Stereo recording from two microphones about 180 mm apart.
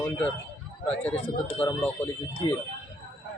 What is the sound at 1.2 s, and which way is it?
Speech, 10° left (ahead or behind).